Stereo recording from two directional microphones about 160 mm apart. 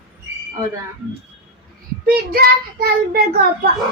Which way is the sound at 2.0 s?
70° right (ahead or behind).